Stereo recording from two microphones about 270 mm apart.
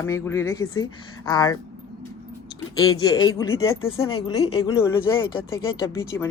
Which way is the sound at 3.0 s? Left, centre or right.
Centre.